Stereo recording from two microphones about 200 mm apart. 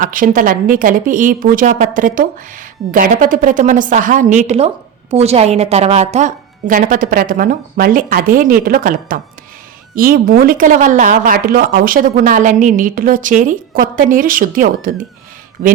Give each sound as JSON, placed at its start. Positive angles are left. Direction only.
{"t": 0.0, "sound": "a woman's voice", "side_deg": -45}